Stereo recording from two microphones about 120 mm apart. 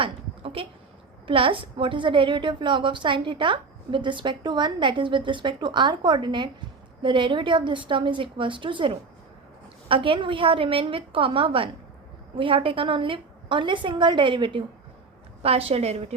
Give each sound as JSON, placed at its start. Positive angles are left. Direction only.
{"t": 0.0, "sound": "a sound", "side_deg": -50}
{"t": 1.3, "sound": "a woman's voice", "side_deg": -50}
{"t": 15.4, "sound": "a woman's voice", "side_deg": -55}